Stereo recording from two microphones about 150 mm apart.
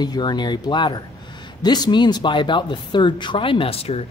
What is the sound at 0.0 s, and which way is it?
Speech, 30° left (ahead or behind).